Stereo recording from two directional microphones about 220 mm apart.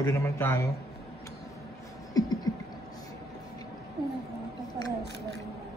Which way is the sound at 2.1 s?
15° left (ahead or behind).